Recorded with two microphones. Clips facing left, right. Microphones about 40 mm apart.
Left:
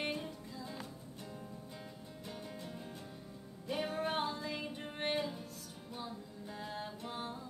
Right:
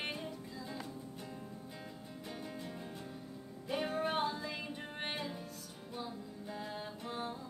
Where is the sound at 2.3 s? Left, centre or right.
Centre.